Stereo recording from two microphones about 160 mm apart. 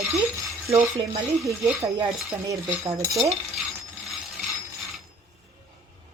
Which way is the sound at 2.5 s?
20° right (ahead or behind).